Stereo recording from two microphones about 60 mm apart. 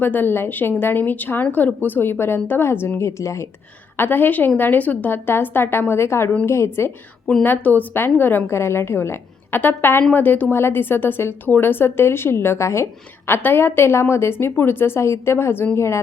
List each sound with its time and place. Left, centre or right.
0.0 s a woman's voice: left
3.0 s a woman's voice: left
3.9 s a woman's voice: left
7.4 s a woman's voice: left
8.4 s a woman's voice: left